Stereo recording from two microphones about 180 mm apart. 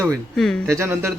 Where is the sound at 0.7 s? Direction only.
15° right (ahead or behind).